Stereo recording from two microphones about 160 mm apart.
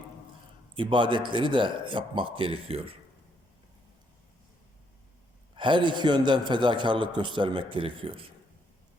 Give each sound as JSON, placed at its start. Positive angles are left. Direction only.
{"t": 0.8, "sound": "a man's voice", "side_deg": -30}
{"t": 5.5, "sound": "a man's voice", "side_deg": -30}